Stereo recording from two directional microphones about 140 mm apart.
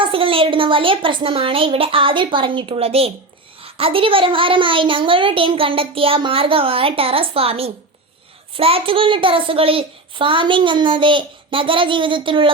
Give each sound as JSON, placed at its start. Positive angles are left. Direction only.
{"t": 0.0, "sound": "a child's voice", "side_deg": -40}